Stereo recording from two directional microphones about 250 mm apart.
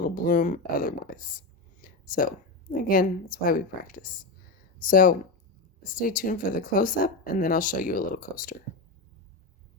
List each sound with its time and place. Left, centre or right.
0.0 s a woman's voice: left